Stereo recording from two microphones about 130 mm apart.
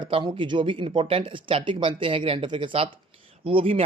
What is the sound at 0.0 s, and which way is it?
Speech, 40° right (ahead or behind).